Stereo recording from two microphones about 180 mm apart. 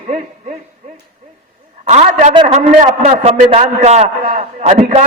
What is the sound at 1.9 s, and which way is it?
A man's voice, 40° right (ahead or behind).